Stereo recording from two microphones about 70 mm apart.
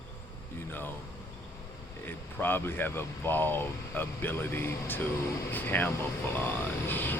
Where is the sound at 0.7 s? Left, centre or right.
Left.